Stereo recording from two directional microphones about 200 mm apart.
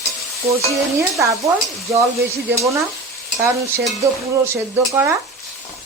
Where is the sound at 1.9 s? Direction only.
15° right (ahead or behind).